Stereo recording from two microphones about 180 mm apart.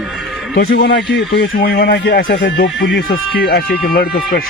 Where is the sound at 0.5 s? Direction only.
70° left (ahead or behind).